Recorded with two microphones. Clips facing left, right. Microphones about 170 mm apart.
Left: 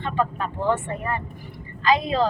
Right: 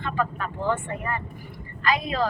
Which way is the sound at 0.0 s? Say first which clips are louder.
Left 3 dB; 25° left (ahead or behind).